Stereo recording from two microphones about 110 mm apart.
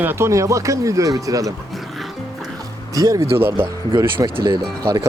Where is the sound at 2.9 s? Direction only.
35° right (ahead or behind).